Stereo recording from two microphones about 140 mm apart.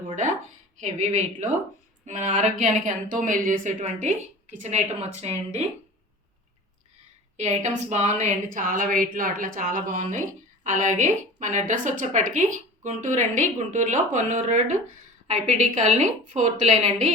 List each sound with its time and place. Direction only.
0.8 s a woman's voice: 55° right (ahead or behind)
7.3 s a woman's voice: 55° right (ahead or behind)